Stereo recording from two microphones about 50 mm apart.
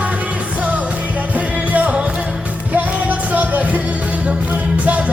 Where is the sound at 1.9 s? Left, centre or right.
Right.